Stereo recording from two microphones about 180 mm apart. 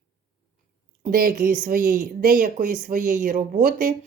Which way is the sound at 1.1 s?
50° right (ahead or behind).